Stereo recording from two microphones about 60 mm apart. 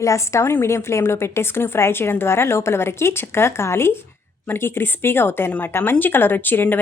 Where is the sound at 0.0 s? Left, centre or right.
Left.